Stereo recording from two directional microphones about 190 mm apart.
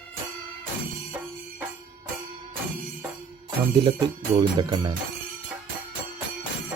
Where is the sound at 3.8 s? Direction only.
25° right (ahead or behind).